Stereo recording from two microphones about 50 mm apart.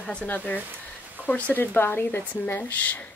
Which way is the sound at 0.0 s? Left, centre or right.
Centre.